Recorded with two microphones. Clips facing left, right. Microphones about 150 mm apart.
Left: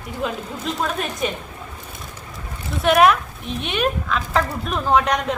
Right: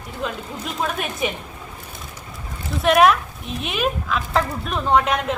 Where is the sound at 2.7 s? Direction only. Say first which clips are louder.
Even; centre (ahead or behind).